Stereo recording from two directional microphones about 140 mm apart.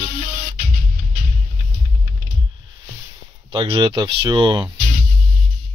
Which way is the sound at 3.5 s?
35° right (ahead or behind).